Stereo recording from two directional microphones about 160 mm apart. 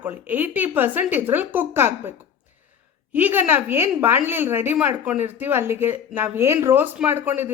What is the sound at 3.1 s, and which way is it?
A woman's voice, 10° right (ahead or behind).